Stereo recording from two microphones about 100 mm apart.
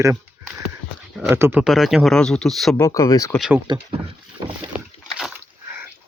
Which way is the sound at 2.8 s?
35° left (ahead or behind).